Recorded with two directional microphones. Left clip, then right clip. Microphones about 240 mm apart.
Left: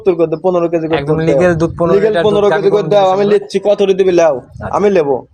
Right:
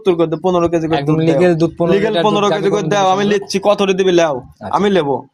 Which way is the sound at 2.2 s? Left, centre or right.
Right.